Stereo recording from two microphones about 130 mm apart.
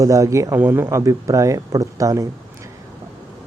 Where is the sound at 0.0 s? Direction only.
25° right (ahead or behind).